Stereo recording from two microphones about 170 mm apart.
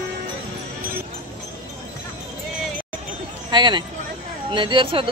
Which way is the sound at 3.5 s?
25° right (ahead or behind).